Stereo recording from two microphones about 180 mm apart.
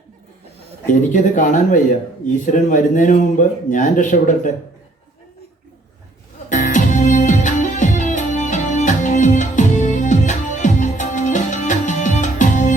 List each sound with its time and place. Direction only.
0.9 s speech: 45° left (ahead or behind)
6.5 s music: 45° left (ahead or behind)